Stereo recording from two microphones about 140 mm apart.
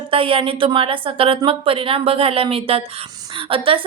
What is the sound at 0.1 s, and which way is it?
A woman's voice, 40° right (ahead or behind).